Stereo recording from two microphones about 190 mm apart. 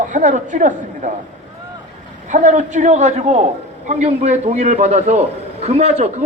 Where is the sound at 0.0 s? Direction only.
40° right (ahead or behind).